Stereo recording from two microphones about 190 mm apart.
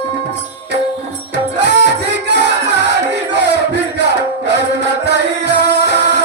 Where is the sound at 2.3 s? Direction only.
65° right (ahead or behind).